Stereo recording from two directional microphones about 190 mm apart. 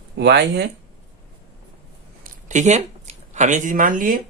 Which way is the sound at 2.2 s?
40° right (ahead or behind).